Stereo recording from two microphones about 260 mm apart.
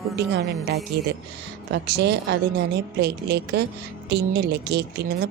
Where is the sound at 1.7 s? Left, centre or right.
Right.